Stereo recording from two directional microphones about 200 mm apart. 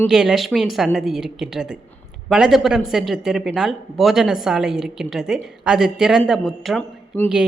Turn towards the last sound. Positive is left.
turn(degrees=5)  # may be behind; listen again after turning